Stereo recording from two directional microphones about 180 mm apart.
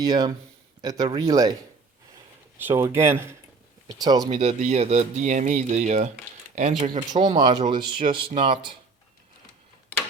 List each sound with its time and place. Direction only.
0.0 s speech: 20° right (ahead or behind)
2.6 s speech: 10° right (ahead or behind)
4.3 s speech: 35° right (ahead or behind)
7.1 s speech: 25° right (ahead or behind)